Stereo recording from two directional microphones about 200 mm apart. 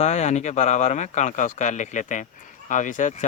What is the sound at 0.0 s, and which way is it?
Speech, 35° left (ahead or behind).